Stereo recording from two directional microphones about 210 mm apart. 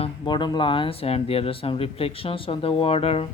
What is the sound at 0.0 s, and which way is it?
Speech, 20° left (ahead or behind).